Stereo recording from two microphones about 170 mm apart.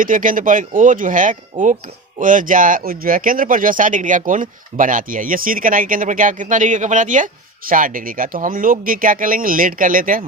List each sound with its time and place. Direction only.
0.0 s speech: 55° right (ahead or behind)